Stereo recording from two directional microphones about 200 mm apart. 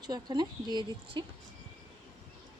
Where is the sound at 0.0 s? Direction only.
20° right (ahead or behind).